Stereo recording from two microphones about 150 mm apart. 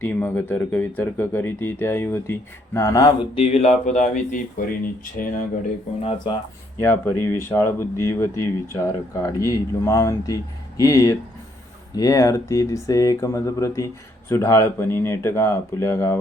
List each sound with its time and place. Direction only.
0.0 s speech: 15° left (ahead or behind)
3.3 s speech: 45° left (ahead or behind)
6.0 s speech: 40° left (ahead or behind)
6.7 s speech: 15° left (ahead or behind)